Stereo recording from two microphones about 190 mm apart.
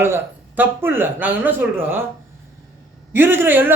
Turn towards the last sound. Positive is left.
turn(degrees=-10)  # may be behind; listen again after turning